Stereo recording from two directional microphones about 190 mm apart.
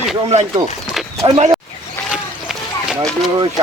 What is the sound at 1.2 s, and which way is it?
Speech, 30° right (ahead or behind).